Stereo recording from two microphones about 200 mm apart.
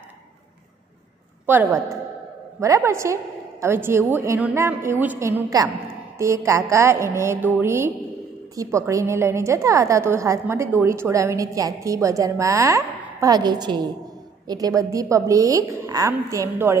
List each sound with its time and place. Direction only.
1.4 s a woman's voice: 10° right (ahead or behind)